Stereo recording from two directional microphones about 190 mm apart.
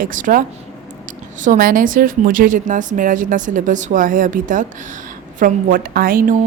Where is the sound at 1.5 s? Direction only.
45° right (ahead or behind).